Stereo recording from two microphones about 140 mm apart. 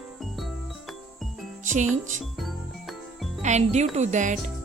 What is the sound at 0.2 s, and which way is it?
Music, centre (ahead or behind).